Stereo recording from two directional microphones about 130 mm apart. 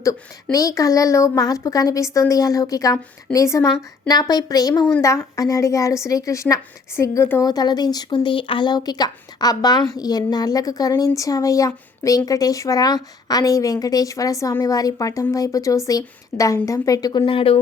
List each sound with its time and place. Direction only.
0.5 s speech: 25° left (ahead or behind); by 17.6 s 45° left (ahead or behind)